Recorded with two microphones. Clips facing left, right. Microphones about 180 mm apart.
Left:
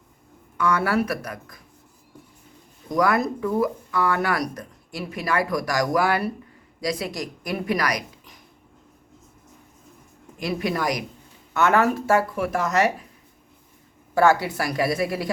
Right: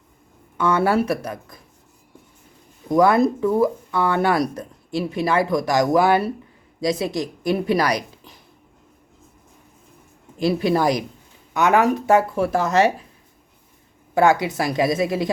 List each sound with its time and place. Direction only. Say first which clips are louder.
0.5 s speech: right 3 dB; 25° right (ahead or behind)
2.9 s speech: right 6 dB; 25° right (ahead or behind)
10.3 s speech: right 7 dB; 30° right (ahead or behind)
11.5 s speech: right 2 dB; 15° right (ahead or behind)
12.4 s speech: right 4 dB; 30° right (ahead or behind)
14.2 s speech: right 2 dB; 20° right (ahead or behind)